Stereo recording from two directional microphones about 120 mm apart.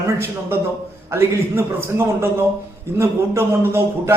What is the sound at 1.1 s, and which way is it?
A man's voice, 20° right (ahead or behind).